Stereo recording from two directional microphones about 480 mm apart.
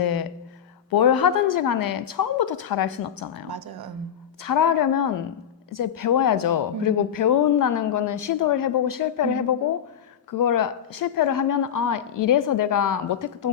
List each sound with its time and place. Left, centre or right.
0.0 s a sound: left
0.9 s a woman's voice: left
4.4 s a woman's voice: left